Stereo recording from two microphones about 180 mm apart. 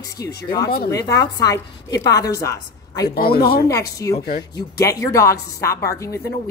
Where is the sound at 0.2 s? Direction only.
20° left (ahead or behind).